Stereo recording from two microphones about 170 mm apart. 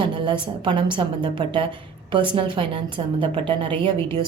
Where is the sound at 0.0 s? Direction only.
25° right (ahead or behind).